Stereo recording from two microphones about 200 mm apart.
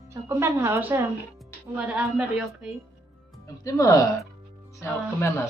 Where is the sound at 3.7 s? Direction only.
15° left (ahead or behind).